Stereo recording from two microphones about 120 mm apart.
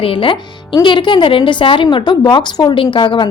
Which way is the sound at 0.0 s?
45° left (ahead or behind).